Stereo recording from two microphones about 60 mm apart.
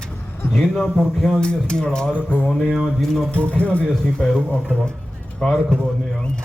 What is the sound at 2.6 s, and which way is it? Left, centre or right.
Speech, centre.